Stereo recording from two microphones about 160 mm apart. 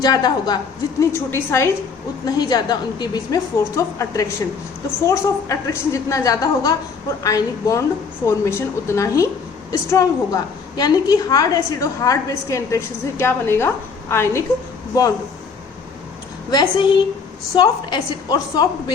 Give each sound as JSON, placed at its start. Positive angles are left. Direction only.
{"t": 0.0, "sound": "a woman's voice", "side_deg": 25}
{"t": 16.5, "sound": "a woman's voice", "side_deg": 25}